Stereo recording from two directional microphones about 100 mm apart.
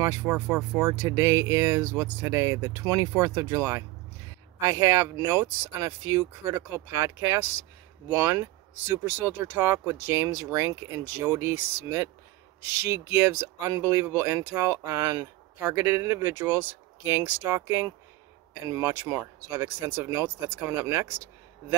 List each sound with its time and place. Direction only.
0.0 s speech: 30° right (ahead or behind)
12.9 s speech: 25° right (ahead or behind)